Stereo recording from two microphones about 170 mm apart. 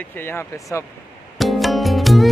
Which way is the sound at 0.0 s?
10° left (ahead or behind).